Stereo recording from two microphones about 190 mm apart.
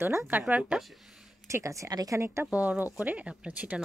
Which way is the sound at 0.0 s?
15° right (ahead or behind).